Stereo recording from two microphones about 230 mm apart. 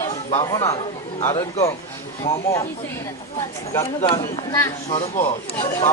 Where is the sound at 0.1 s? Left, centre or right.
Left.